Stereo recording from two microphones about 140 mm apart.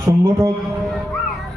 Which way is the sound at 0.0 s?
25° right (ahead or behind).